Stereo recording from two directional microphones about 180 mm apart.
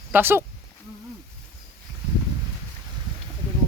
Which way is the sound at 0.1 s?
10° right (ahead or behind).